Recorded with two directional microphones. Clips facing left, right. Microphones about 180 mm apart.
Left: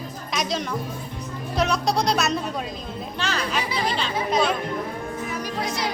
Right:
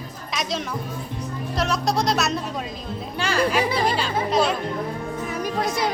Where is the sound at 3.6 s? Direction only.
50° right (ahead or behind).